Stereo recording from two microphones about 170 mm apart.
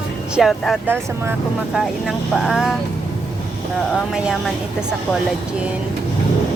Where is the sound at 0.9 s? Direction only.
10° right (ahead or behind).